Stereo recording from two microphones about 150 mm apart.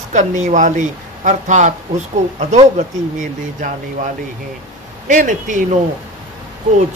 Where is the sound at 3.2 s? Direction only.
60° right (ahead or behind).